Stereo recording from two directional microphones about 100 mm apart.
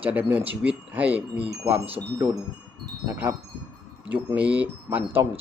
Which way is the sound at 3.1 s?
15° right (ahead or behind).